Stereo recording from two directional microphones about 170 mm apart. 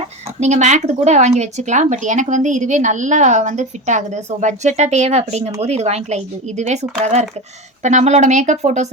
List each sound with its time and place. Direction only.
0.3 s speech: 40° right (ahead or behind)